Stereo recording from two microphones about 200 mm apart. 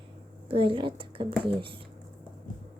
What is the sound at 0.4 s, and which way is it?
A woman's voice, 25° right (ahead or behind).